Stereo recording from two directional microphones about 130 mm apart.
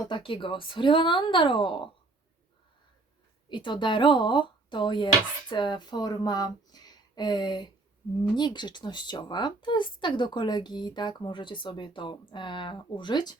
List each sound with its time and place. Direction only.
0.0 s speech: 40° left (ahead or behind)
3.5 s speech: 35° left (ahead or behind)